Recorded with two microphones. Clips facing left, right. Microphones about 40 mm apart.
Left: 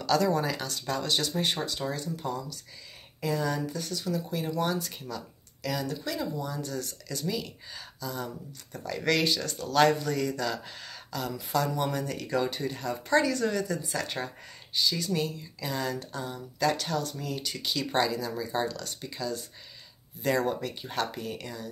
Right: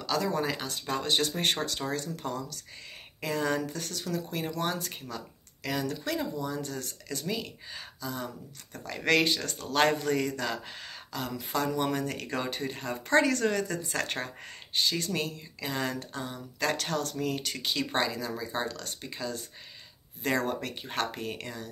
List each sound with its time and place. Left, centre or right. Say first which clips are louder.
0.0 s speech: left 4 dB; centre; by 1.4 s right
1.4 s speech: even; right
3.2 s speech: even; right
3.7 s speech: left 2 dB; right
5.1 s speech: left 1 dB; right
16.5 s speech: left 2 dB; right
17.6 s speech: left 2 dB; right
18.7 s speech: left 1 dB; right